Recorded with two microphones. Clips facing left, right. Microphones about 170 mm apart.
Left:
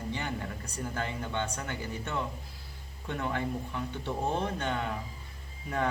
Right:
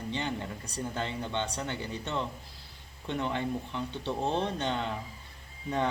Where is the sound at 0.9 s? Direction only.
25° right (ahead or behind).